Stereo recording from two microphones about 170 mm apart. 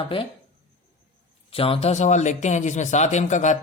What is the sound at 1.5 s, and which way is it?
Speech, 35° left (ahead or behind).